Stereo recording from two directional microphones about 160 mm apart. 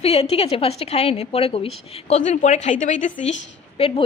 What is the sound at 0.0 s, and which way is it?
A woman's voice, 40° left (ahead or behind).